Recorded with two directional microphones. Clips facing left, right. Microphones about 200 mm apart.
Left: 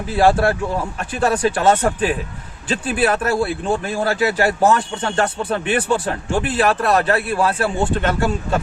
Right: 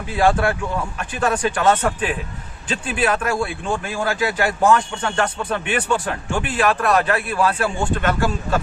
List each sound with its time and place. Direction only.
0.2 s speech: 35° left (ahead or behind)